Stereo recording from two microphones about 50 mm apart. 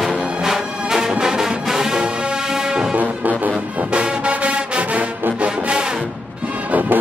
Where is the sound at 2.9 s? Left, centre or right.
Right.